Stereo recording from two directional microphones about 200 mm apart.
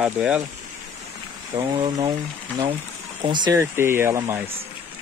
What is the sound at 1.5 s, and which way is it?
Speech, 20° right (ahead or behind).